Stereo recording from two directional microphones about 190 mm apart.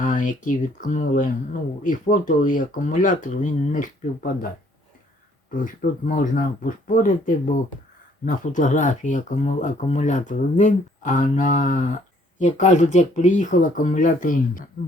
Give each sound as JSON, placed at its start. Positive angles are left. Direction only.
{"t": 0.0, "sound": "speech", "side_deg": 40}
{"t": 5.5, "sound": "speech", "side_deg": 45}